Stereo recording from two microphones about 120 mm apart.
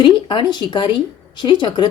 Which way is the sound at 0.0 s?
40° left (ahead or behind).